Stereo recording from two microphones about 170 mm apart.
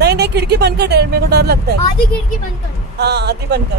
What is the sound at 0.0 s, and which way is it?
Speech, 75° right (ahead or behind).